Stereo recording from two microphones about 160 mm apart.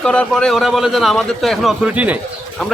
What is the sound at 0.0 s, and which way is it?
A man's voice, 5° left (ahead or behind).